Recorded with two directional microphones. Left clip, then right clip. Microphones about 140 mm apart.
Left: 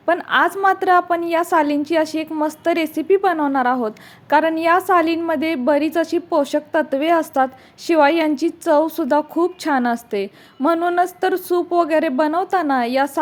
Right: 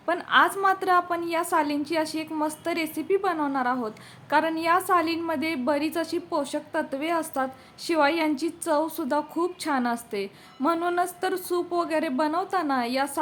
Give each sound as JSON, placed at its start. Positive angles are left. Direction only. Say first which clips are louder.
{"t": 0.0, "sound": "a woman's voice", "louder": "left 5 dB", "side_deg": 35}